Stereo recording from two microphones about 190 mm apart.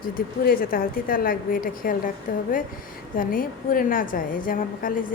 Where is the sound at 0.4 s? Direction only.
50° left (ahead or behind).